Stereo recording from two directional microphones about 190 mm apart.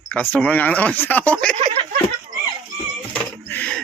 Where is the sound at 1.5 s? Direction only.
30° right (ahead or behind).